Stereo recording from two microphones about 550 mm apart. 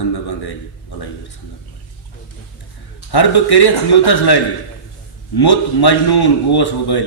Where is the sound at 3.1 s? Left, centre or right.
Left.